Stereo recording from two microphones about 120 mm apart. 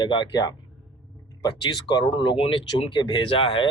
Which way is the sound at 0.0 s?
40° left (ahead or behind).